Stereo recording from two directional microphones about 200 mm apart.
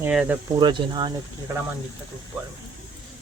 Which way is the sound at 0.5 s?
20° right (ahead or behind).